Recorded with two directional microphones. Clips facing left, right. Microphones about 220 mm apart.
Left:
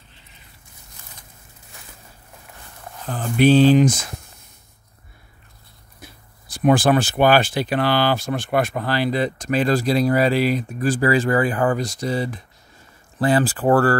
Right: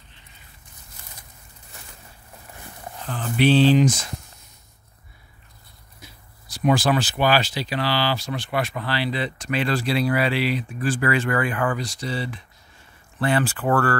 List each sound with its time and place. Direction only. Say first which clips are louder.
3.1 s speech: left 4 dB; 45° left (ahead or behind)
6.6 s speech: left 4 dB; 50° left (ahead or behind)